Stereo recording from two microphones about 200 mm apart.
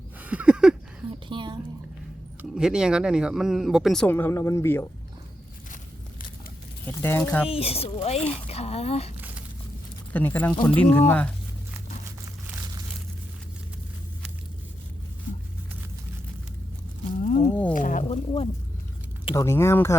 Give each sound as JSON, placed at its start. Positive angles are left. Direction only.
{"t": 0.2, "sound": "a sound", "side_deg": -5}
{"t": 1.3, "sound": "a sound", "side_deg": -25}
{"t": 2.4, "sound": "speech", "side_deg": -5}
{"t": 6.8, "sound": "speech", "side_deg": 10}
{"t": 7.5, "sound": "speech", "side_deg": 30}
{"t": 10.1, "sound": "speech", "side_deg": 10}
{"t": 17.2, "sound": "wild animals", "side_deg": 40}
{"t": 17.7, "sound": "speech", "side_deg": 40}
{"t": 19.2, "sound": "speech", "side_deg": 20}